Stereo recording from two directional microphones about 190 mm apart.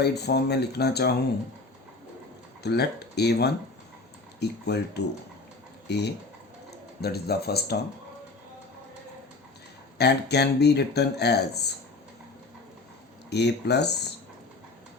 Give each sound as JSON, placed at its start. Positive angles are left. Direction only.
{"t": 0.0, "sound": "speech", "side_deg": 60}
{"t": 2.6, "sound": "speech", "side_deg": 60}
{"t": 10.0, "sound": "speech", "side_deg": 60}
{"t": 13.3, "sound": "speech", "side_deg": 60}